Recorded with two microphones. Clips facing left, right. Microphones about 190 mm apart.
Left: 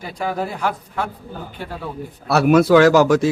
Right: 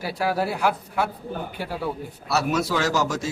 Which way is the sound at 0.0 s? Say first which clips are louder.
Even; 5° right (ahead or behind).